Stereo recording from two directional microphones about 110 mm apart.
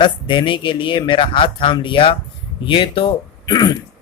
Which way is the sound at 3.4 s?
35° left (ahead or behind).